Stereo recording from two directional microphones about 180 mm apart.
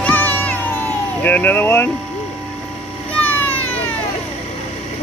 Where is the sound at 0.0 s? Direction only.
10° left (ahead or behind).